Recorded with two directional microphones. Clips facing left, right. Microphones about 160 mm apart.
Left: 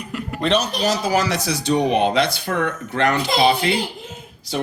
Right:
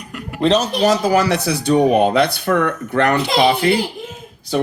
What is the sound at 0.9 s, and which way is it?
Speech, 55° right (ahead or behind).